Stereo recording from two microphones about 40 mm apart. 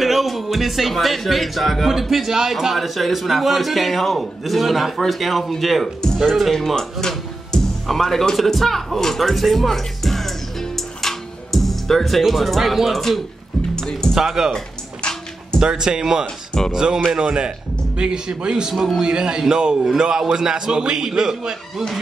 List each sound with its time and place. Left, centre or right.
0.0 s speech: centre
6.5 s speech: centre
7.8 s music: centre
12.3 s speech: centre
13.7 s music: centre
14.1 s a man's voice: centre
15.0 s music: left
15.6 s a man's voice: centre
18.7 s speech: centre
18.9 s a man's voice: right